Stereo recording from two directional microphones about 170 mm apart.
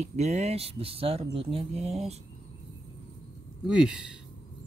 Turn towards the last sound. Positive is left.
turn(degrees=-5)  # may be behind; listen again after turning